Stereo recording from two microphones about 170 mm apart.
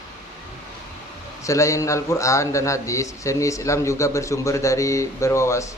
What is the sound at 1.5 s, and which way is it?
A man's voice, 20° left (ahead or behind).